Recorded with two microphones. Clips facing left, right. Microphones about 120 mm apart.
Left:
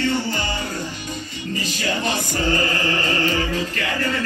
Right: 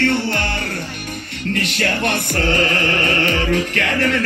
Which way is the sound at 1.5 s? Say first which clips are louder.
Right 3 dB; 70° right (ahead or behind).